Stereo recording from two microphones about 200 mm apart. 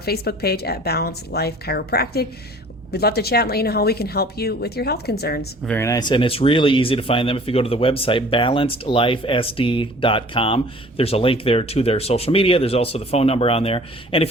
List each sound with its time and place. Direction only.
0.0 s a woman's voice: 50° left (ahead or behind)
5.6 s speech: 10° left (ahead or behind); by 14.3 s 30° left (ahead or behind)